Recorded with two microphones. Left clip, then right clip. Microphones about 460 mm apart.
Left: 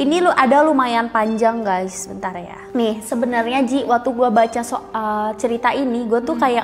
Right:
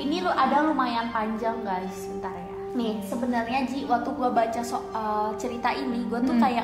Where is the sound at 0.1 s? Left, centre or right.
Left.